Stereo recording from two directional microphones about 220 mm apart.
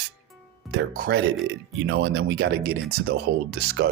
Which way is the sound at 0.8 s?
45° right (ahead or behind).